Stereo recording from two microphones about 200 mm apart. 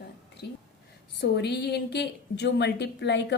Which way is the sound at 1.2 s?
55° left (ahead or behind).